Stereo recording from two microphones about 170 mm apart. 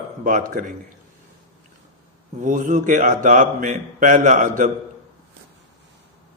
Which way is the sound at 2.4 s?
50° right (ahead or behind).